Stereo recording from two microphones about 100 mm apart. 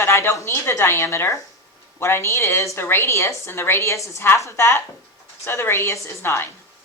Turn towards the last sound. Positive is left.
turn(degrees=25)  # may be behind; listen again after turning